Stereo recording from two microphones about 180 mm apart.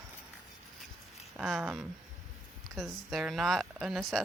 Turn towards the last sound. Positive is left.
turn(degrees=0)  # may be behind; listen again after turning